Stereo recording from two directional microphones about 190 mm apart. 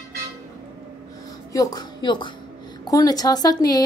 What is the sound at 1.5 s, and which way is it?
A woman's voice, 20° left (ahead or behind).